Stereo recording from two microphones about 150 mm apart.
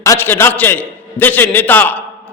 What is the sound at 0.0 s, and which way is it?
A man's voice, 15° left (ahead or behind).